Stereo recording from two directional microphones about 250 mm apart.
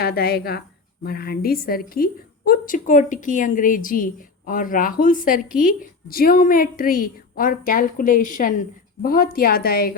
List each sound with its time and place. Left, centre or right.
0.0 s a woman's voice: left